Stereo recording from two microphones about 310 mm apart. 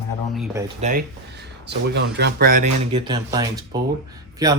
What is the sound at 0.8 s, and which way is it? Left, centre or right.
Speech, right.